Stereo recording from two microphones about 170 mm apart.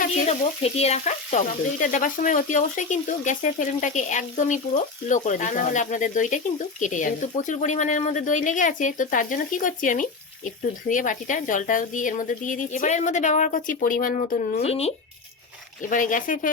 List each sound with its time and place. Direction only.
0.0 s speech: 40° left (ahead or behind)
15.8 s speech: 50° left (ahead or behind)